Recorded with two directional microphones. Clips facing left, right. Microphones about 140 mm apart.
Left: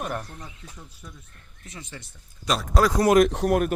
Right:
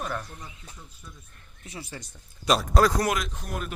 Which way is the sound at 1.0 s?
80° left.